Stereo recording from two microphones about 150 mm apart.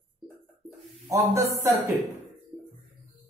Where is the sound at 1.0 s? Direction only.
20° right (ahead or behind).